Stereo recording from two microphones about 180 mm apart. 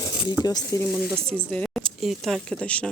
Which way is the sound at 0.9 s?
Centre (ahead or behind).